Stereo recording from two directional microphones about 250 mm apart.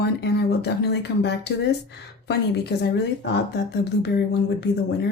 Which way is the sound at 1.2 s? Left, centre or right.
Left.